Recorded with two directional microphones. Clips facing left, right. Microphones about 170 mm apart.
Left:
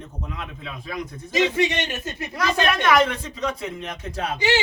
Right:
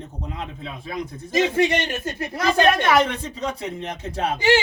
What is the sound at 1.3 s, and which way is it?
Speech, 45° right (ahead or behind).